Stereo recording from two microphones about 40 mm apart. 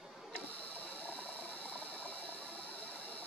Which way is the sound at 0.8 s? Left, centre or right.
Left.